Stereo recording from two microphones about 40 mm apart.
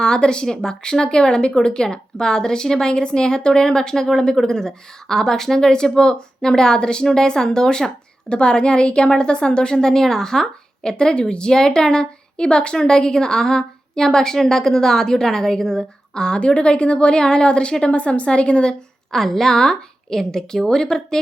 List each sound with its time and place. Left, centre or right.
0.0 s a woman's voice: left
19.1 s speech: centre